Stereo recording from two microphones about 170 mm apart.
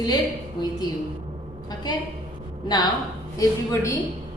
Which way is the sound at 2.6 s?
25° left (ahead or behind).